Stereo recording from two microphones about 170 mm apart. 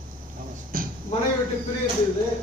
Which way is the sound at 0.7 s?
55° right (ahead or behind).